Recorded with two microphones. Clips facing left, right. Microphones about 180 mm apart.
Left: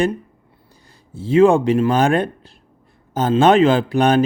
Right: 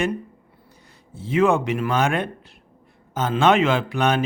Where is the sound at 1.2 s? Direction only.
30° left (ahead or behind).